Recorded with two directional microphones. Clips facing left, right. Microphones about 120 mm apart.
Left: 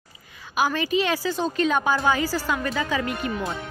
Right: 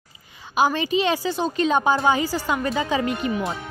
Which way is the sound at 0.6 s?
20° right (ahead or behind).